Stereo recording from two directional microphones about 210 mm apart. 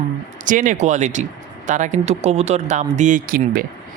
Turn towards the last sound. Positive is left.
turn(degrees=-45)  # may be behind; listen again after turning